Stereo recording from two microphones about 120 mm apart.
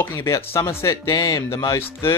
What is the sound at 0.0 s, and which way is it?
Speech, 20° left (ahead or behind).